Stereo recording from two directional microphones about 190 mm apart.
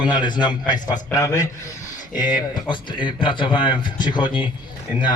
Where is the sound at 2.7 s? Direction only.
25° left (ahead or behind).